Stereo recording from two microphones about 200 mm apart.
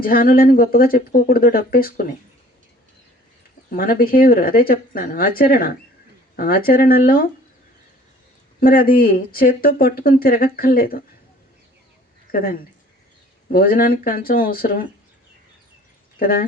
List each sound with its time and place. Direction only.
0.0 s speech: 45° left (ahead or behind)
3.8 s speech: 45° left (ahead or behind)
8.6 s speech: 45° left (ahead or behind)
12.3 s speech: 45° left (ahead or behind)
16.1 s speech: 45° left (ahead or behind)